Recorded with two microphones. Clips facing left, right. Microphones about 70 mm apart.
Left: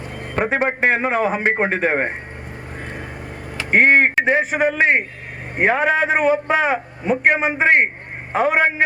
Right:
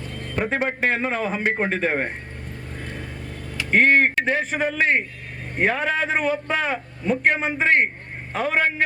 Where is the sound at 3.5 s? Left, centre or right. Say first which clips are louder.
Left 3 dB; left.